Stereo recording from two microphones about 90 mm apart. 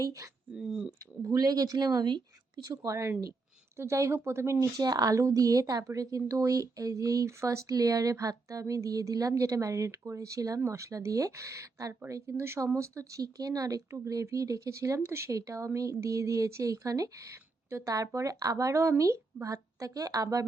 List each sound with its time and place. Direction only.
0.0 s speech: 35° right (ahead or behind)
0.5 s speech: 5° right (ahead or behind)
1.2 s speech: 40° right (ahead or behind)
2.8 s speech: 35° right (ahead or behind)
4.8 s speech: 45° right (ahead or behind)